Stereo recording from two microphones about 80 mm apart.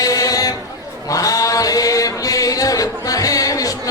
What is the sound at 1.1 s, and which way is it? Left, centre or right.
Chant, left.